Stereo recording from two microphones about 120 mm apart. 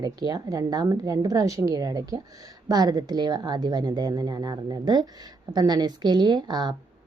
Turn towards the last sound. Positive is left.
turn(degrees=-35)  # may be behind; listen again after turning